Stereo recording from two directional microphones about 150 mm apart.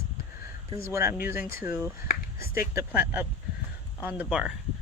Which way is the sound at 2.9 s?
10° right (ahead or behind).